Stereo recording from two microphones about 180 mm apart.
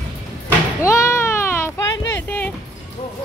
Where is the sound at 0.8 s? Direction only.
15° left (ahead or behind).